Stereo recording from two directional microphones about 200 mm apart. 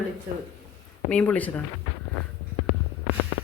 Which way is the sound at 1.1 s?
5° left (ahead or behind).